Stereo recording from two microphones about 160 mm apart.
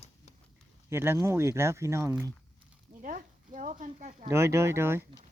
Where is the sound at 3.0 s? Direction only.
50° right (ahead or behind).